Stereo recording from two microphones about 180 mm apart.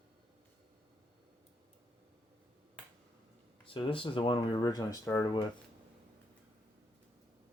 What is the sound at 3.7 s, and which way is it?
Speech, 30° left (ahead or behind).